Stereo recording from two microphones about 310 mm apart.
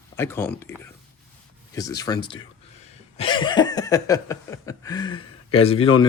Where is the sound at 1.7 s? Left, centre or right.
Centre.